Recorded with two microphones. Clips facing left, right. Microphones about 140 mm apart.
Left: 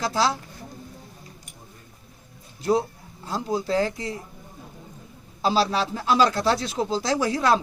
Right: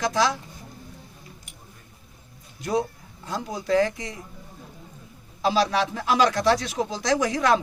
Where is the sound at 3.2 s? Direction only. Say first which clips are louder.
Left 4 dB; 30° left (ahead or behind).